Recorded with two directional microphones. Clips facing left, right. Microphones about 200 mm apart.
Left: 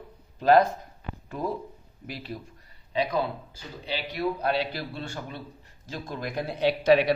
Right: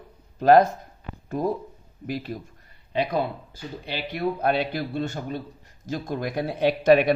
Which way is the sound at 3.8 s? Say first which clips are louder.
Right 1 dB; 55° right (ahead or behind).